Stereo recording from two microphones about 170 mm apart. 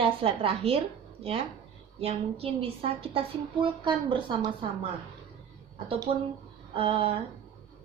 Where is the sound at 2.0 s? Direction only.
35° right (ahead or behind).